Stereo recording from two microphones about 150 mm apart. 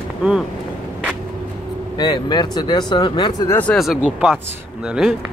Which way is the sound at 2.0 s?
30° left (ahead or behind).